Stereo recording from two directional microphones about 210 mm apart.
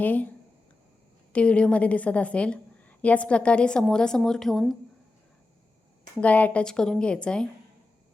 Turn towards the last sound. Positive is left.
turn(degrees=5)  # may be behind; listen again after turning